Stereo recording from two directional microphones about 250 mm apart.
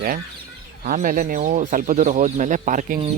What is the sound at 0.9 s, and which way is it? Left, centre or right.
Speech, right.